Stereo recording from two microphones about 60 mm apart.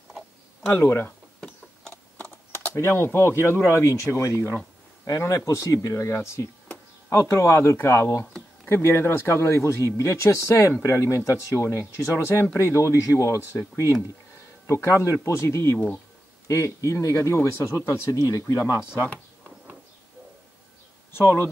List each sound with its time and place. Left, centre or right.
2.1 s typing: left
2.7 s speech: left
5.0 s speech: left
16.4 s speech: left
18.1 s speech: left